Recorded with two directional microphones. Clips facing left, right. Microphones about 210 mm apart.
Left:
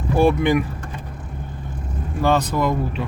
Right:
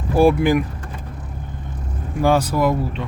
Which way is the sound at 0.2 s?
5° right (ahead or behind).